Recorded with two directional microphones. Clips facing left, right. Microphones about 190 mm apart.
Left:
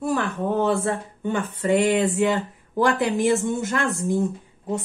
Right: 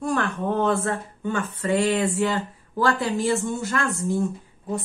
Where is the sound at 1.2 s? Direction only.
15° left (ahead or behind).